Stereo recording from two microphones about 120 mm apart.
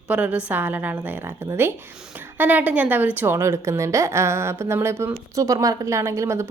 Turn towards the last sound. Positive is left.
turn(degrees=-25)  # may be behind; listen again after turning